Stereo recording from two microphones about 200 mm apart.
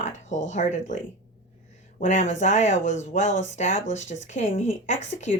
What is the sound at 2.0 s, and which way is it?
Speech, 40° left (ahead or behind).